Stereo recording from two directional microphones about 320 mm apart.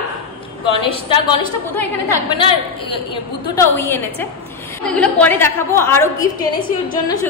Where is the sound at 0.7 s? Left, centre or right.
Centre.